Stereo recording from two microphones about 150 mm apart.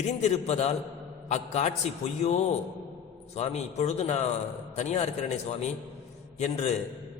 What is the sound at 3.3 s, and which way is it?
A man's voice, 45° left (ahead or behind).